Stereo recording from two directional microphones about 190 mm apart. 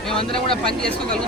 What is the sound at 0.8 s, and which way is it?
Speech, 5° left (ahead or behind).